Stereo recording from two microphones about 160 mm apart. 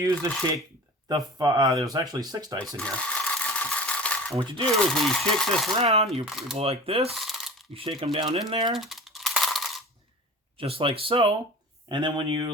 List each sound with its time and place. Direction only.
0.0 s speech: 20° right (ahead or behind)
2.6 s sewing machine: 5° left (ahead or behind)
4.8 s speech: 5° left (ahead or behind)
5.7 s speech: 40° right (ahead or behind)
6.2 s speech: 5° right (ahead or behind)
6.6 s speech: 35° right (ahead or behind)
7.1 s a sound: centre (ahead or behind)
7.7 s speech: 35° right (ahead or behind)
8.7 s a sound: centre (ahead or behind)
10.6 s speech: 35° right (ahead or behind)